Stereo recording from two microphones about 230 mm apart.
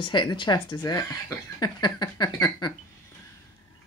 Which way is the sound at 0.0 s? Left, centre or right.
Centre.